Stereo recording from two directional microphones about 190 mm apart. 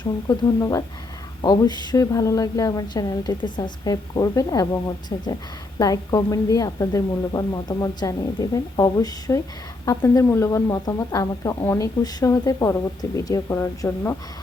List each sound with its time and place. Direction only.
0.0 s a woman's voice: 20° left (ahead or behind)